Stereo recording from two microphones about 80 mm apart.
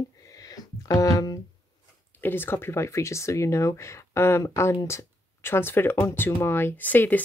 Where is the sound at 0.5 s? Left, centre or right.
Left.